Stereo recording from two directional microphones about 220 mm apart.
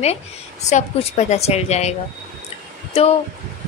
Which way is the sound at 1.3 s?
30° left (ahead or behind).